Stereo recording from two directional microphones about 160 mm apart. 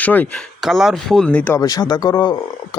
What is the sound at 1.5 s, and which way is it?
Speech, 20° left (ahead or behind).